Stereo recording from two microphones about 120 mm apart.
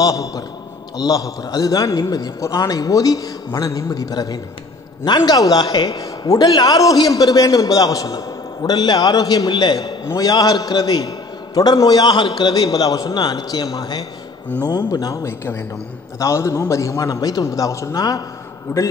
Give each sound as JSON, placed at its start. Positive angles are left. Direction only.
{"t": 0.0, "sound": "a man's voice", "side_deg": 30}
{"t": 18.7, "sound": "a man's voice", "side_deg": 20}